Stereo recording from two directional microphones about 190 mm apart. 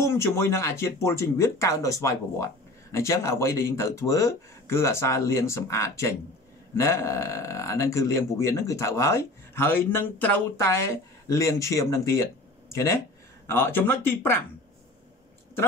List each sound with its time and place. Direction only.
0.0 s speech: 15° left (ahead or behind)